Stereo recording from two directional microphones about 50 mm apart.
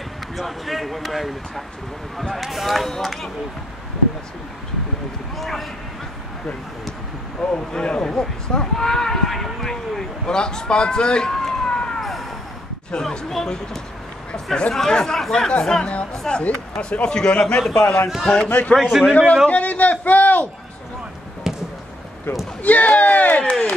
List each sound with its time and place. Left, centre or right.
0.4 s speech: centre
5.4 s speech: centre
7.5 s speech: centre
13.3 s a man's voice: centre
18.5 s speech: left
18.8 s speech: centre
19.4 s a sound: left
21.5 s basketball bounce: centre
22.6 s speech: left